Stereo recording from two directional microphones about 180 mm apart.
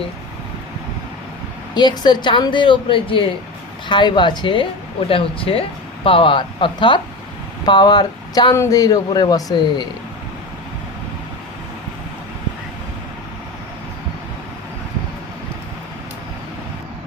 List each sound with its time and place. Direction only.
1.7 s a woman's voice: 25° left (ahead or behind)